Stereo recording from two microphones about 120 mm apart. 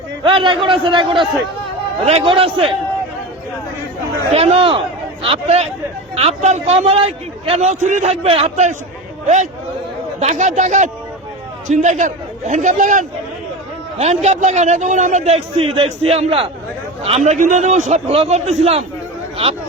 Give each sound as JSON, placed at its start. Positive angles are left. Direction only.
{"t": 0.2, "sound": "a man's voice", "side_deg": -45}
{"t": 2.0, "sound": "a man's voice", "side_deg": -55}
{"t": 4.3, "sound": "a man's voice", "side_deg": -60}
{"t": 10.2, "sound": "a man's voice", "side_deg": -80}
{"t": 14.0, "sound": "a man's voice", "side_deg": -65}
{"t": 17.2, "sound": "a man's voice", "side_deg": -90}